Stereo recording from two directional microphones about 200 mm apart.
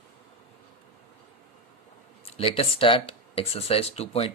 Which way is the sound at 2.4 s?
30° left (ahead or behind).